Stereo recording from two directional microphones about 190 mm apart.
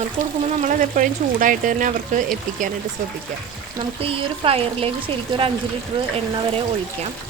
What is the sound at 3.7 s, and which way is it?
Speech, 30° right (ahead or behind).